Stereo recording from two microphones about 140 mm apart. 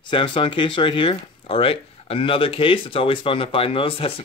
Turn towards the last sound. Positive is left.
turn(degrees=40)  # may be behind; listen again after turning